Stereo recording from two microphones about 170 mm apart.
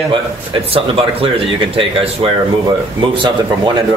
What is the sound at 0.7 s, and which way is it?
Speech, 35° right (ahead or behind).